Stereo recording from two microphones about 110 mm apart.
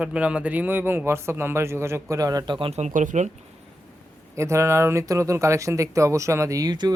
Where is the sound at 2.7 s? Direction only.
90° right.